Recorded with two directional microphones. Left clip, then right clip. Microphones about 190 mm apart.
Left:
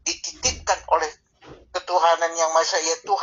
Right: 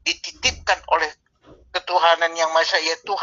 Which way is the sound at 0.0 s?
25° right (ahead or behind).